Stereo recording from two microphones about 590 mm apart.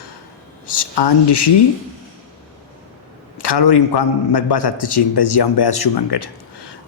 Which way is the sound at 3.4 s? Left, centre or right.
Left.